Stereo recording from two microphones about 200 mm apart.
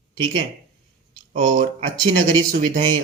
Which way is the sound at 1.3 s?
45° right (ahead or behind).